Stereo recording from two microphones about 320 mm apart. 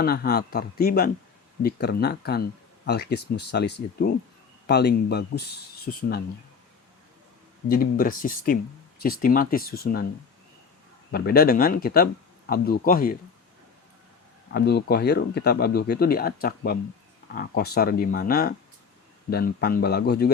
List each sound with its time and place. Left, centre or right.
0.0 s speech: left
7.7 s speech: left
11.1 s speech: left
14.5 s speech: left